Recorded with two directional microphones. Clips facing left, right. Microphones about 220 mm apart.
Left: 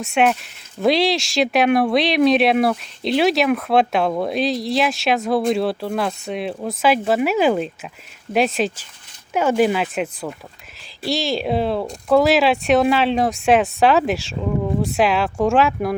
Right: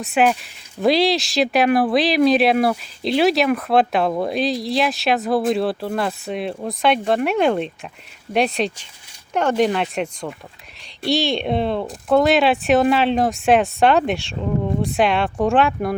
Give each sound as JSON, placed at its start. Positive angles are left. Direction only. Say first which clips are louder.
{"t": 0.0, "sound": "speech", "louder": "even", "side_deg": 0}